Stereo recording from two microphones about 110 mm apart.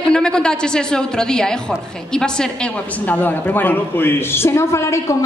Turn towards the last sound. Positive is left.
turn(degrees=25)  # may be behind; listen again after turning